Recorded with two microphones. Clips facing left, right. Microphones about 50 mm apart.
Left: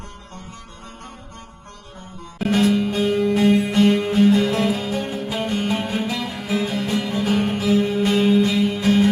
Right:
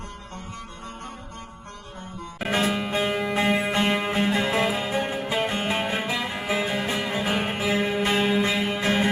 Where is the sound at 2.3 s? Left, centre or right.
Centre.